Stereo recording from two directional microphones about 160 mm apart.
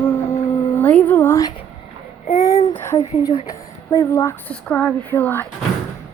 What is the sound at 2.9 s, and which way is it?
Speech, 40° left (ahead or behind).